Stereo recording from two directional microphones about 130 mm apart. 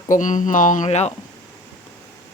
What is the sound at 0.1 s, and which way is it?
Speech, 80° left.